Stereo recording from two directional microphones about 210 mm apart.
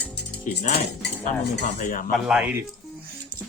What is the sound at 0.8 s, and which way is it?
Cutlery, 55° left (ahead or behind).